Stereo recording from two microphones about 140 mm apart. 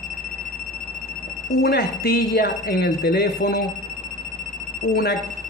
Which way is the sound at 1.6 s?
90° left.